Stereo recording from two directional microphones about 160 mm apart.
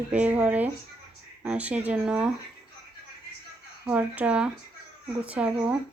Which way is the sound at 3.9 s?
10° right (ahead or behind).